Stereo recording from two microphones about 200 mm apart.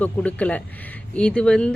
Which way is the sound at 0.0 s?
5° left (ahead or behind).